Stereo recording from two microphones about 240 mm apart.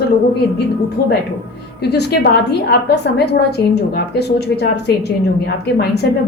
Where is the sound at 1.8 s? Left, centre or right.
Left.